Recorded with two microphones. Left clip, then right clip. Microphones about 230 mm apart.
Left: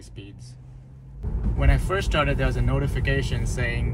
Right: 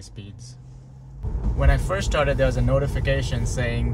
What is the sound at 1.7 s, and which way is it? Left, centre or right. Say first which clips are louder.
Speech: even; right.